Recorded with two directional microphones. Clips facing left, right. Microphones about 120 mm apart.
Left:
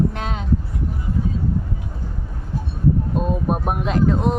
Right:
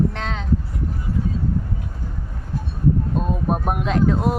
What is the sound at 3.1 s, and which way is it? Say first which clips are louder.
Speech: left 1 dB; 5° left (ahead or behind).